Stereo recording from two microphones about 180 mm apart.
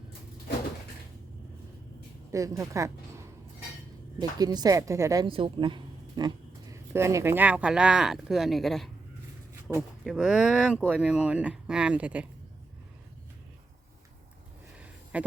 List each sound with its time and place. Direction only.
2.3 s speech: 15° right (ahead or behind)
5.3 s speech: 30° right (ahead or behind); by 8.9 s centre (ahead or behind)
10.0 s speech: 5° right (ahead or behind)
15.1 s a sound: 5° right (ahead or behind)